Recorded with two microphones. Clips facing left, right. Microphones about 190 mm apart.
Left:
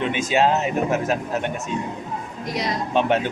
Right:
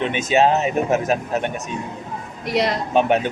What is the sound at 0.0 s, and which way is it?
Speech, 20° right (ahead or behind).